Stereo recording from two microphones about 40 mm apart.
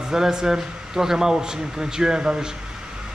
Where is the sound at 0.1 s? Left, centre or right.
Centre.